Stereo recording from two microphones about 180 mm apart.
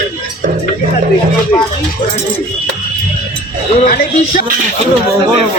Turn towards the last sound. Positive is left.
turn(degrees=50)  # may be behind; listen again after turning